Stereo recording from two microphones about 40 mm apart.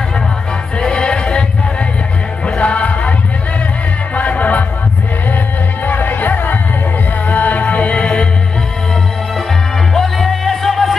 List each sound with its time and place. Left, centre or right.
0.7 s music: centre
2.4 s music: left
5.9 s music: left
9.9 s music: centre